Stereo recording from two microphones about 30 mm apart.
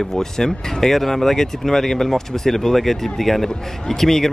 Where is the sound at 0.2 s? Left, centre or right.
Centre.